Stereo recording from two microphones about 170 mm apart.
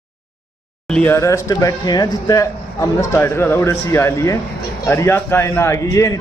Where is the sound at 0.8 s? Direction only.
10° left (ahead or behind).